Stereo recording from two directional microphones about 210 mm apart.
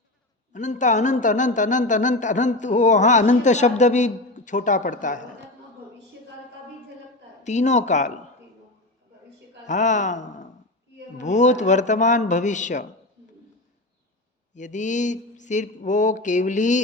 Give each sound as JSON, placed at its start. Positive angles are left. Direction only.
{"t": 0.5, "sound": "speech", "side_deg": 35}
{"t": 7.4, "sound": "speech", "side_deg": 35}
{"t": 9.6, "sound": "speech", "side_deg": 35}
{"t": 14.5, "sound": "speech", "side_deg": 35}